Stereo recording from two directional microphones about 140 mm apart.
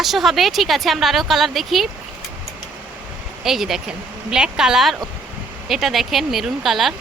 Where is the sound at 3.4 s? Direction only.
Centre (ahead or behind).